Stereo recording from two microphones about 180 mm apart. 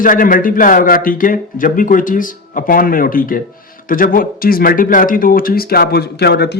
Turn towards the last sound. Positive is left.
turn(degrees=65)  # may be behind; listen again after turning